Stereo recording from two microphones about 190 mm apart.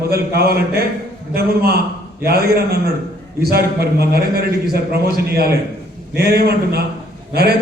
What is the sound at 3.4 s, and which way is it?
A man's voice, 55° right (ahead or behind).